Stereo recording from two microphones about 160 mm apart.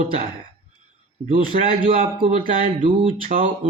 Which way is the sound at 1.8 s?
35° right (ahead or behind).